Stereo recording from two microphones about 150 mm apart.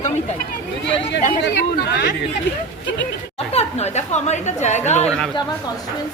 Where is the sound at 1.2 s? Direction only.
90° left.